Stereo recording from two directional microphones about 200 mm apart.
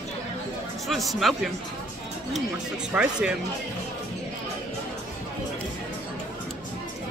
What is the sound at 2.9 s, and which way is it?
Speech, 5° right (ahead or behind).